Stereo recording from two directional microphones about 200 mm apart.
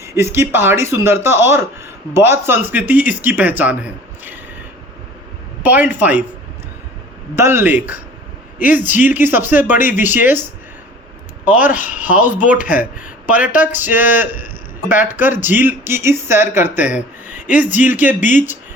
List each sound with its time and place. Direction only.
0.0 s speech: 15° right (ahead or behind)
5.6 s speech: 10° right (ahead or behind)
7.3 s speech: 10° right (ahead or behind)
11.6 s speech: 10° right (ahead or behind)
12.5 s speech: 40° left (ahead or behind)
13.4 s speech: 10° right (ahead or behind)